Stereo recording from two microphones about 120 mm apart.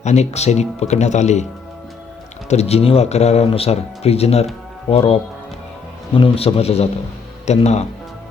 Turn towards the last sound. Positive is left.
turn(degrees=65)  # may be behind; listen again after turning